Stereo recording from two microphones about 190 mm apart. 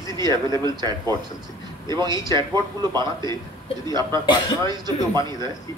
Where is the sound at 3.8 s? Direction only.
20° right (ahead or behind).